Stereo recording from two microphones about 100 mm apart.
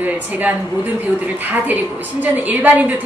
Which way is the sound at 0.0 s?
15° right (ahead or behind).